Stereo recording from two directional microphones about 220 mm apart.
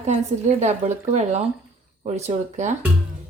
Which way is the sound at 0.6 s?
30° right (ahead or behind).